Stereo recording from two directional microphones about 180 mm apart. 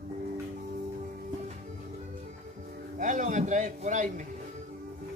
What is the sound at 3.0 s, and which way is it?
A man's voice, 45° right (ahead or behind).